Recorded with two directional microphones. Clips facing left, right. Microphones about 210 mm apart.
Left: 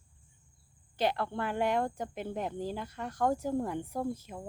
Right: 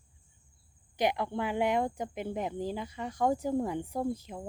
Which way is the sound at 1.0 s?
15° right (ahead or behind).